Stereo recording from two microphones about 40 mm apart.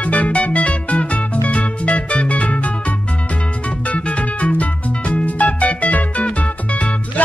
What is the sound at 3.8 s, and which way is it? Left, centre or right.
Music, left.